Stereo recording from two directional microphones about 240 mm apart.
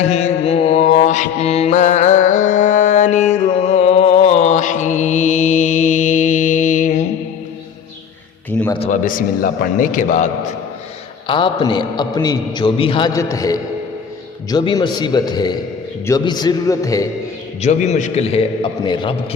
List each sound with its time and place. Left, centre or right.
0.0 s mantra: left
8.4 s a sound: centre
8.7 s a man's voice: left
11.3 s a man's voice: left
17.6 s a man's voice: left